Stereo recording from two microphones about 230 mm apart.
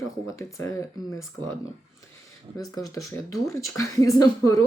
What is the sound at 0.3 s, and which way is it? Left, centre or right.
Speech, centre.